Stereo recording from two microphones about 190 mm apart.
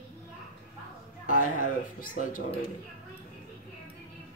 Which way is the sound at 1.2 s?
45° left (ahead or behind).